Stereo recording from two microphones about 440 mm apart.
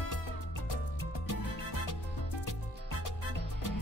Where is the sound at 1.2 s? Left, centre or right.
Left.